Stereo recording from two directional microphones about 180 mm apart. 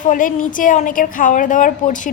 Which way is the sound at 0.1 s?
45° left (ahead or behind).